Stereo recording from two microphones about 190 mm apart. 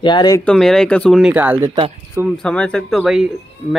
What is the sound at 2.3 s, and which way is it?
Speech, 5° left (ahead or behind).